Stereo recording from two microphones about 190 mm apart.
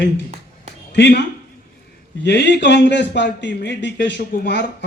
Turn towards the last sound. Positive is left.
turn(degrees=60)  # may be behind; listen again after turning